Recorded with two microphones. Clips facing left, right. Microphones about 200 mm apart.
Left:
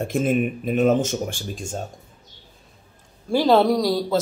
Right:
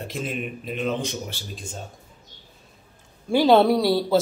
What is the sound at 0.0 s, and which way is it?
Speech, 50° left (ahead or behind).